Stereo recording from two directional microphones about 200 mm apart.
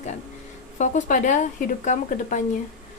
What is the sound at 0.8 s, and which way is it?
A woman's voice, 40° left (ahead or behind).